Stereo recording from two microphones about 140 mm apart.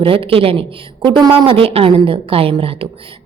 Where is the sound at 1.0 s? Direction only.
30° right (ahead or behind).